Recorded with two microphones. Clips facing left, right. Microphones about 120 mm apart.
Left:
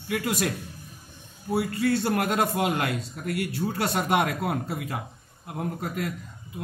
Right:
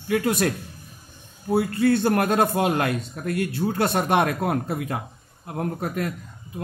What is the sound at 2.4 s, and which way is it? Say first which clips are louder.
Speech: right 4 dB; 40° right (ahead or behind).